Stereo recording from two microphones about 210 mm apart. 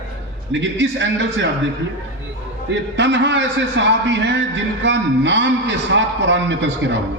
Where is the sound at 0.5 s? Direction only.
60° right (ahead or behind).